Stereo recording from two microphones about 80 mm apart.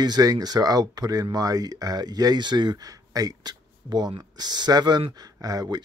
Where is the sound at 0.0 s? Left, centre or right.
Right.